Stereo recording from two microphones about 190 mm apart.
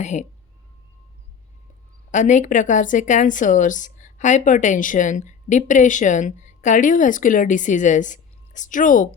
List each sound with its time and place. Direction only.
0.0 s a woman's voice: 40° left (ahead or behind)
2.0 s a woman's voice: 40° left (ahead or behind)